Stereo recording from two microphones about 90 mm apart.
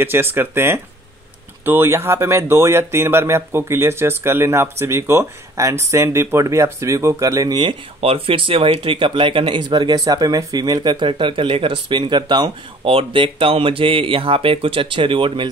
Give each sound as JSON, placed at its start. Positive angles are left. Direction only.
{"t": 0.0, "sound": "speech", "side_deg": -25}
{"t": 7.5, "sound": "speech", "side_deg": -80}